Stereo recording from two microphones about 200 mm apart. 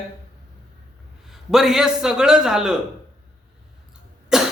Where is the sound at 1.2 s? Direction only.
Centre (ahead or behind).